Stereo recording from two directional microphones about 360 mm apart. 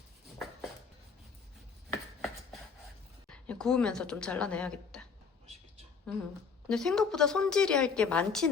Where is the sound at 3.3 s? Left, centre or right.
Centre.